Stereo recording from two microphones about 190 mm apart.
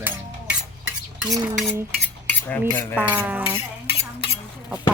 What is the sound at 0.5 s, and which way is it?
Stir, 5° right (ahead or behind).